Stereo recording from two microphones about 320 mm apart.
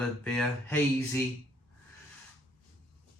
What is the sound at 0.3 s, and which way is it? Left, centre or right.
Speech, centre.